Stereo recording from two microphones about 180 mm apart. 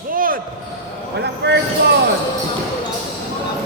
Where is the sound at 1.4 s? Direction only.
70° right (ahead or behind).